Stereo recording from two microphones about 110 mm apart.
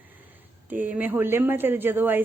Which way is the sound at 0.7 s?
15° right (ahead or behind).